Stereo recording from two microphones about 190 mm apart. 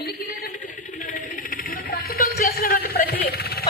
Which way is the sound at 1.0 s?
45° left (ahead or behind).